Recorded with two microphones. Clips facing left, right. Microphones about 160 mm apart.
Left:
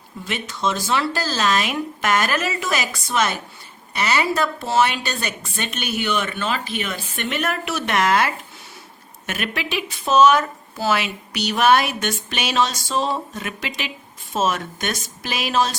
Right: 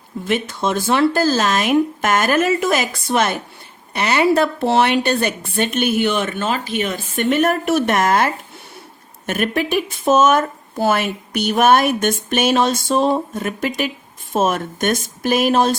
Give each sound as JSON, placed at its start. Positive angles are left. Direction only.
{"t": 0.3, "sound": "speech", "side_deg": -50}